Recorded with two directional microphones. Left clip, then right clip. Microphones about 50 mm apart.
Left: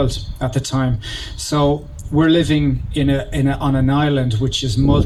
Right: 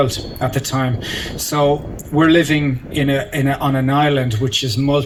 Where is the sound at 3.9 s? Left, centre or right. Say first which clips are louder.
Right 3 dB; left.